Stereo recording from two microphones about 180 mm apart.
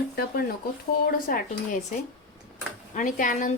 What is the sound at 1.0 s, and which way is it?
Speech, 50° left (ahead or behind).